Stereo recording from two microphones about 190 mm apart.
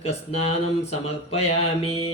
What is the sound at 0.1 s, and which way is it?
Speech, 35° left (ahead or behind).